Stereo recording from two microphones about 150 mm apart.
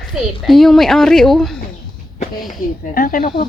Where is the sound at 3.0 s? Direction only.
65° left (ahead or behind).